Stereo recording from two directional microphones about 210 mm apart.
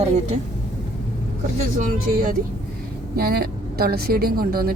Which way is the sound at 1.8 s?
40° right (ahead or behind).